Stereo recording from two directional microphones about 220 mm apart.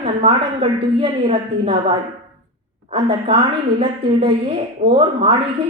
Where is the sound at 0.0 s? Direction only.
25° right (ahead or behind).